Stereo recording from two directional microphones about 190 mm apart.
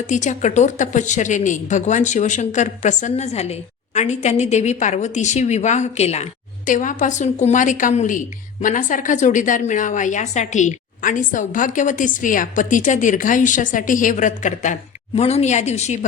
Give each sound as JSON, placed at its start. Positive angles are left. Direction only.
{"t": 0.1, "sound": "a woman's voice", "side_deg": 40}